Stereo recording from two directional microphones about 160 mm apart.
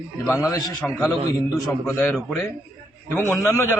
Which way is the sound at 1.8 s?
15° left (ahead or behind).